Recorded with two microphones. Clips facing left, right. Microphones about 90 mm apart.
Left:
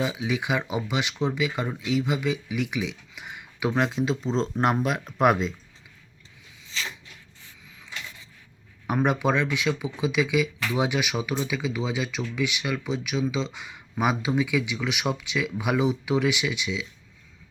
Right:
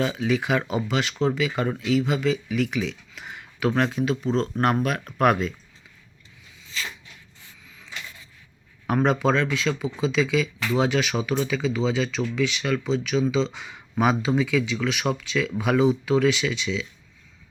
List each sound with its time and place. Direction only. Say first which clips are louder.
0.0 s speech: right 3 dB; 10° left (ahead or behind)
8.9 s speech: right 2 dB; 10° left (ahead or behind)